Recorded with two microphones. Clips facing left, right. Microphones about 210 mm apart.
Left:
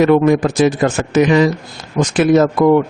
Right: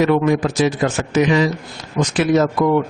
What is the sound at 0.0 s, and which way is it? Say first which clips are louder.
Speech: left 4 dB; 50° left (ahead or behind).